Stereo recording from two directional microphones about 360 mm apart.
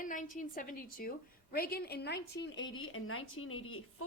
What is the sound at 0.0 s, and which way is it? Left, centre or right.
A woman's voice, left.